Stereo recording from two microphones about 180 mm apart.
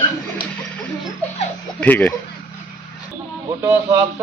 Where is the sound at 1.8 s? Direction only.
10° left (ahead or behind).